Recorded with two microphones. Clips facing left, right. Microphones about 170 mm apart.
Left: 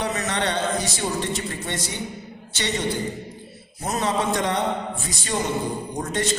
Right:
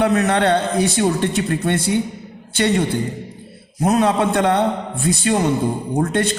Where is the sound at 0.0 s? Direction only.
60° right (ahead or behind).